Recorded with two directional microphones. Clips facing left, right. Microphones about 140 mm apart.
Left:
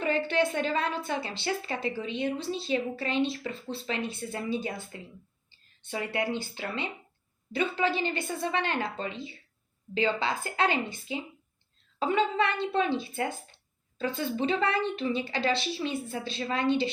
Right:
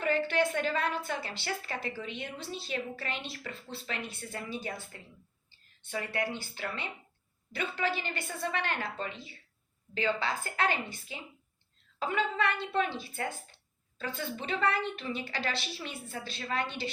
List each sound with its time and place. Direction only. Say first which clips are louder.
0.0 s a woman's voice: left 2 dB; 25° left (ahead or behind)